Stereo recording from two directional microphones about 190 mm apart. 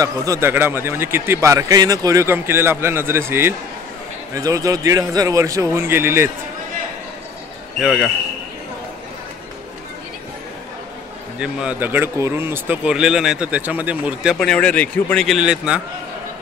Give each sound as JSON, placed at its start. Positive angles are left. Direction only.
{"t": 0.0, "sound": "a man's voice", "side_deg": -15}
{"t": 7.8, "sound": "speech", "side_deg": 0}
{"t": 11.3, "sound": "speech", "side_deg": -5}